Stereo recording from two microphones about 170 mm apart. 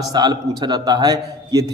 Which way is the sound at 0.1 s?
25° right (ahead or behind).